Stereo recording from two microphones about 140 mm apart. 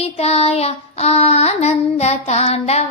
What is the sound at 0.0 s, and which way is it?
Child singing, 45° left (ahead or behind).